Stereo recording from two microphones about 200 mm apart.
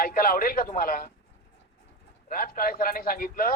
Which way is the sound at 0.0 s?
45° left (ahead or behind).